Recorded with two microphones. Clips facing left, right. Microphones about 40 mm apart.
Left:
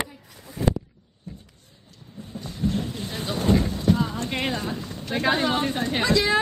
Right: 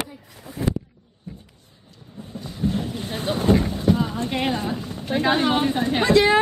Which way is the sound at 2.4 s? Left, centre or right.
Centre.